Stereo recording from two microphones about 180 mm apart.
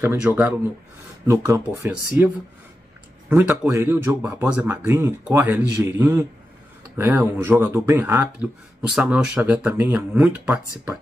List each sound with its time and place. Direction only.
0.0 s speech: 15° right (ahead or behind)